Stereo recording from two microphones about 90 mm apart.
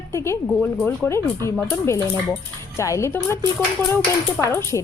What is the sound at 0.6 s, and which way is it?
Speech, 20° left (ahead or behind).